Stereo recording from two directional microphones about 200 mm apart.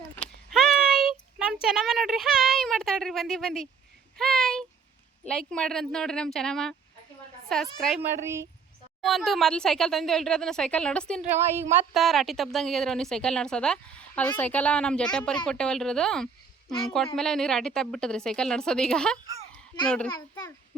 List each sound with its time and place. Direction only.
0.5 s a sound: centre (ahead or behind)
1.6 s speech: centre (ahead or behind)
4.2 s a sound: centre (ahead or behind)
5.5 s speech: 5° left (ahead or behind)
11.5 s speech: 10° right (ahead or behind)
11.9 s speech: centre (ahead or behind)
20.1 s a child's voice: 20° left (ahead or behind)